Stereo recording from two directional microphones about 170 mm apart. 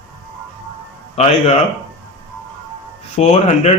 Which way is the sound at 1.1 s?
40° left (ahead or behind).